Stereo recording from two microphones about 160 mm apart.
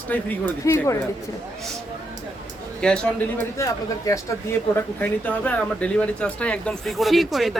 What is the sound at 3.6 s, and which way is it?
Speech, 20° left (ahead or behind).